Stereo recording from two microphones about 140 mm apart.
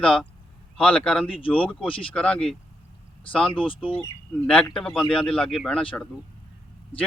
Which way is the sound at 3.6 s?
40° left (ahead or behind).